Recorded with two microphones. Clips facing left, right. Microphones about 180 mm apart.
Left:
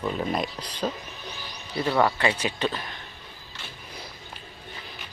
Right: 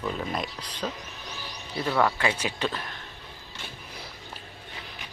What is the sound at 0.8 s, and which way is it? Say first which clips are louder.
Speech: left 4 dB; 20° left (ahead or behind).